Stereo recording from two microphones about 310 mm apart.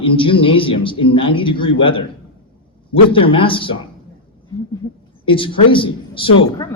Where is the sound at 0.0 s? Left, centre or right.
Centre.